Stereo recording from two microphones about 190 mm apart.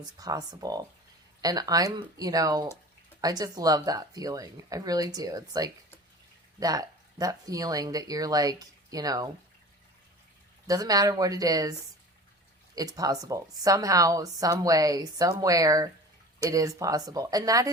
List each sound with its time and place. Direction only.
0.0 s a woman's voice: 20° right (ahead or behind)
10.7 s a woman's voice: 20° right (ahead or behind)
12.7 s a woman's voice: 20° right (ahead or behind)